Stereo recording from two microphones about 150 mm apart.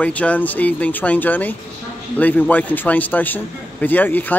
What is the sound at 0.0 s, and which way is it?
A man's voice, 10° left (ahead or behind).